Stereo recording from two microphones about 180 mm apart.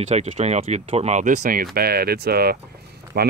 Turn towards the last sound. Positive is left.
turn(degrees=-55)  # may be behind; listen again after turning